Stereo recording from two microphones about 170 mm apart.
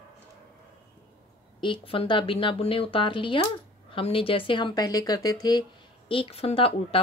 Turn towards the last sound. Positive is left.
turn(degrees=35)  # may be behind; listen again after turning